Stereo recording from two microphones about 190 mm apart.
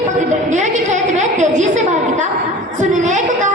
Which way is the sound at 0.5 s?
40° right (ahead or behind).